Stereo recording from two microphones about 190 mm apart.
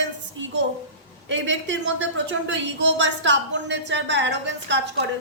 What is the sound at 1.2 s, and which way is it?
A woman's voice, 80° right.